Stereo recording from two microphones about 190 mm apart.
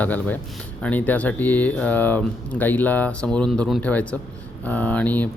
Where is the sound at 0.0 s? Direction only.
10° left (ahead or behind).